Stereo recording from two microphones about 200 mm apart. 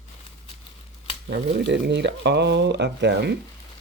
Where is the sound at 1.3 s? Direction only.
60° right (ahead or behind).